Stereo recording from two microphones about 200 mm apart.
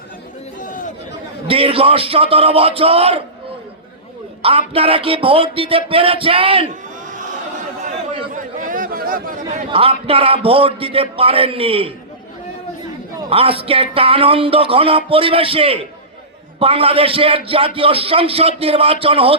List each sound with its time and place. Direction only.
0.6 s chatter: 40° left (ahead or behind)
1.5 s speech: 30° right (ahead or behind)
4.4 s speech: 30° right (ahead or behind)
7.0 s chatter: 40° right (ahead or behind)
8.3 s chatter: 40° right (ahead or behind)
9.6 s speech: 30° right (ahead or behind)
13.1 s speech: 30° right (ahead or behind)